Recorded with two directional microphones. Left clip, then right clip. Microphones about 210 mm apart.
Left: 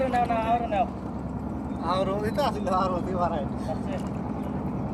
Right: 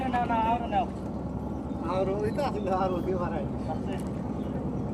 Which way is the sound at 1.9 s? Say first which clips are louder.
Left 2 dB; 25° left (ahead or behind).